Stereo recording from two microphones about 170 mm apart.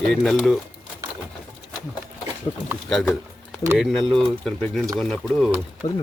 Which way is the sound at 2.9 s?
Centre (ahead or behind).